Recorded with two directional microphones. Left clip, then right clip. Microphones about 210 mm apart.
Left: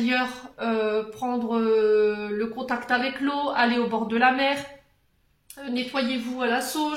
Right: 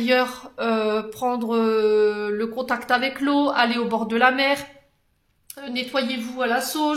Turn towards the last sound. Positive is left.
turn(degrees=-45)  # may be behind; listen again after turning